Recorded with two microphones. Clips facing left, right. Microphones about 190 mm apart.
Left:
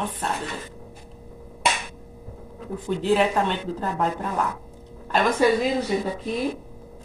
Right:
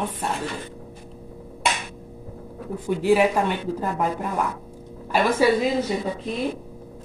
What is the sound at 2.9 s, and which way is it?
A woman's voice, 10° right (ahead or behind).